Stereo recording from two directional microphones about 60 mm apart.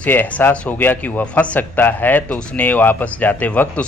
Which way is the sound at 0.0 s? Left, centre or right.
Left.